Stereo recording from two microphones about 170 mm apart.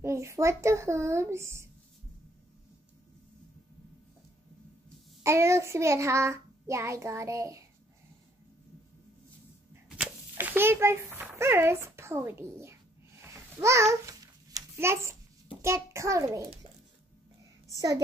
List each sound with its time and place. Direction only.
0.0 s a child's voice: 15° right (ahead or behind)
5.2 s a child's voice: 15° right (ahead or behind)
9.8 s a child's voice: 5° right (ahead or behind)
13.2 s babbling: 15° right (ahead or behind)
15.6 s a child's voice: 15° right (ahead or behind)
17.7 s a woman's voice: 20° right (ahead or behind)